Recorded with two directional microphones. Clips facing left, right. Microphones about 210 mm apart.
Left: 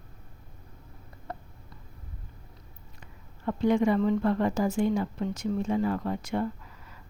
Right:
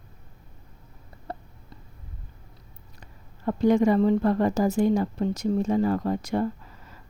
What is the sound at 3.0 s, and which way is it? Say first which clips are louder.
A woman's voice: right 4 dB; 40° right (ahead or behind).